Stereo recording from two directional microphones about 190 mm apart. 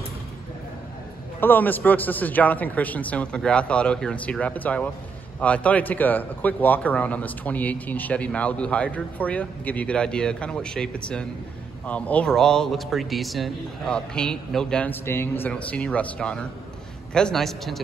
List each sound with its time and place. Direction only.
1.4 s a man's voice: 10° left (ahead or behind)